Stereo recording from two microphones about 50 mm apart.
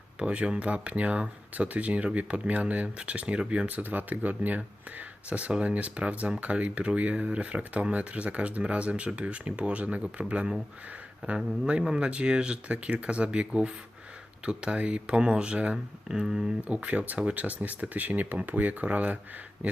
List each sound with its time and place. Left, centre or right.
0.2 s speech: right
3.7 s speech: right; by 16.5 s centre
16.6 s speech: right